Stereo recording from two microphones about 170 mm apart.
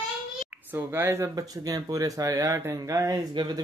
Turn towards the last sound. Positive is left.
turn(degrees=-20)  # may be behind; listen again after turning